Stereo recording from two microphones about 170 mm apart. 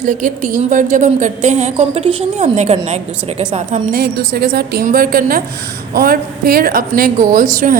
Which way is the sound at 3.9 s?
65° right (ahead or behind).